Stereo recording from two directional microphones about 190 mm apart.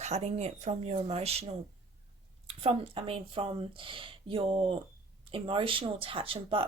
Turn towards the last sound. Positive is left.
turn(degrees=-30)  # may be behind; listen again after turning